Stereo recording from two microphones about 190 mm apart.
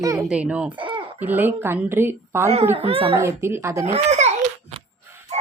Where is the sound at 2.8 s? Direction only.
30° right (ahead or behind).